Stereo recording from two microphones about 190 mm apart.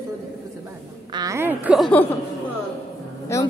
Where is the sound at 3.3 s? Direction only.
15° left (ahead or behind).